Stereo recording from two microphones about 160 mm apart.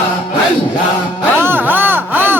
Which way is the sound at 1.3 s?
15° right (ahead or behind).